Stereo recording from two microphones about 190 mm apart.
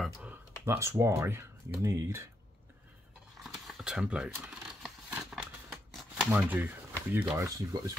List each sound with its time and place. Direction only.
0.0 s computer keyboard: 5° right (ahead or behind)
0.7 s speech: 15° right (ahead or behind)
3.4 s a sound: centre (ahead or behind)
6.3 s speech: 10° right (ahead or behind)